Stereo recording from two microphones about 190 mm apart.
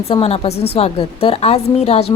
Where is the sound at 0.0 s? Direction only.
30° left (ahead or behind).